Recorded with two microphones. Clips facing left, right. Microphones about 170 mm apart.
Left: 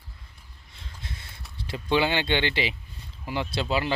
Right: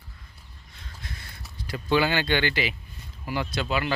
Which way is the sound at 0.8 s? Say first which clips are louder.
Even; 25° left (ahead or behind).